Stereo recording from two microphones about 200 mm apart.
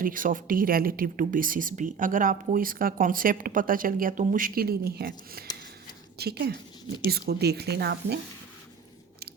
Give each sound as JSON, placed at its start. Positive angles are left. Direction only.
{"t": 0.0, "sound": "a woman's voice", "side_deg": -45}